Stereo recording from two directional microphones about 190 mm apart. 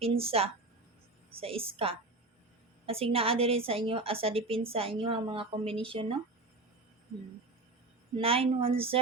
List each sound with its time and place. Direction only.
0.0 s a woman's voice: 30° right (ahead or behind)
8.1 s a woman's voice: 30° right (ahead or behind)